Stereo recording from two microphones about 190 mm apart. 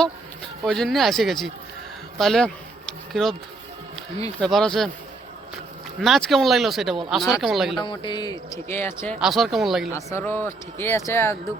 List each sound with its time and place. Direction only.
0.6 s speech: centre (ahead or behind)
4.4 s speech: 5° left (ahead or behind)
6.0 s speech: centre (ahead or behind)
7.8 s speech: 25° left (ahead or behind)
9.2 s speech: centre (ahead or behind)
9.9 s speech: 15° left (ahead or behind)